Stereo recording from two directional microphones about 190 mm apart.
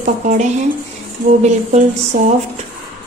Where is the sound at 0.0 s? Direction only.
40° right (ahead or behind).